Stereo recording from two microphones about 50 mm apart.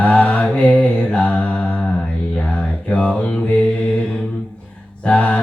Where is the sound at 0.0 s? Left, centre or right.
Left.